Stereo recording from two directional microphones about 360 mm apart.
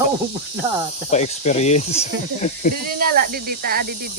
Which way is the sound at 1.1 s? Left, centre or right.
Centre.